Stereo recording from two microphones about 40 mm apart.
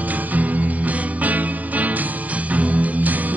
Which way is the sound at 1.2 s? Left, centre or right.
Right.